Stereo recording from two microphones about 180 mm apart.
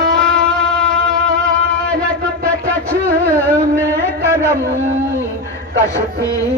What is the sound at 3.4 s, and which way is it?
Carnatic music, 10° left (ahead or behind).